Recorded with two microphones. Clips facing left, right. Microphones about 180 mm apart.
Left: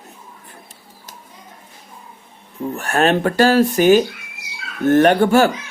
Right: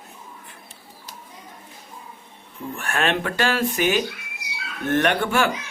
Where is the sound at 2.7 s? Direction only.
40° left (ahead or behind).